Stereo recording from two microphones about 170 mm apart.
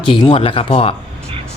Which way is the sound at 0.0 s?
30° left (ahead or behind).